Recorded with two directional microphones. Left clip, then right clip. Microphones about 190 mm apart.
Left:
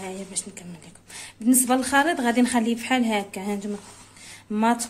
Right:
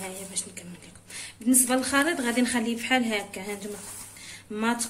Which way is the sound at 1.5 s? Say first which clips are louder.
Left 4 dB; 50° left (ahead or behind).